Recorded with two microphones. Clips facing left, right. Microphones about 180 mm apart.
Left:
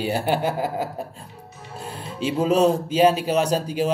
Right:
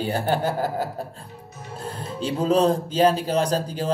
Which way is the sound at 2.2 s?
10° left (ahead or behind).